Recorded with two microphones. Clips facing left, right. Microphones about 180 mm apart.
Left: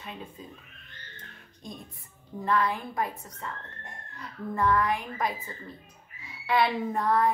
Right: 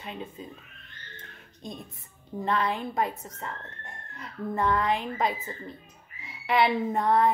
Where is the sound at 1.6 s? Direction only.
25° right (ahead or behind).